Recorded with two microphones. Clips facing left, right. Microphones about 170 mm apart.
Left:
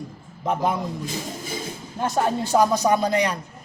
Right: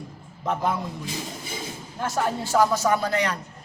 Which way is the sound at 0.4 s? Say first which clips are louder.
Left 2 dB; 15° left (ahead or behind).